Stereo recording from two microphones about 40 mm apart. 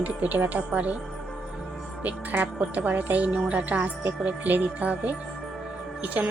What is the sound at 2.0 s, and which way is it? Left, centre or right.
A woman's voice, right.